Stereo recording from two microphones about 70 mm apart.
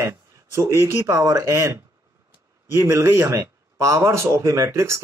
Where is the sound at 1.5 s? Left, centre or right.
Right.